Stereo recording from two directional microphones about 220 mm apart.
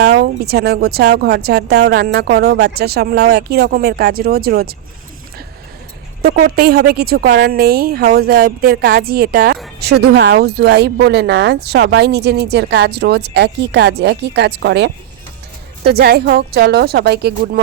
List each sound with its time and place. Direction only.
0.0 s speech: 45° right (ahead or behind)
6.2 s speech: 45° right (ahead or behind)